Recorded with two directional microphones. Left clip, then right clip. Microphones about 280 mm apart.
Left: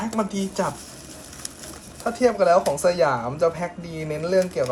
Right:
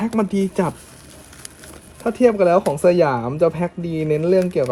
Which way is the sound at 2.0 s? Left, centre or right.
Right.